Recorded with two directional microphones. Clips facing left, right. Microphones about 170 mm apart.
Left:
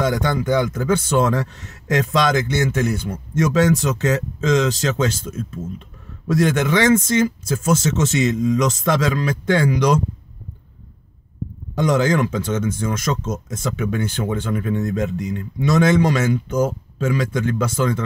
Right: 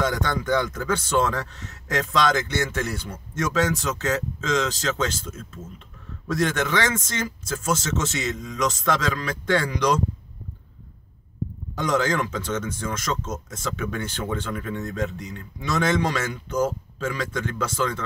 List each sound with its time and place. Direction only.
0.0 s speech: 15° left (ahead or behind)
6.3 s speech: 15° left (ahead or behind)
11.9 s speech: 15° left (ahead or behind)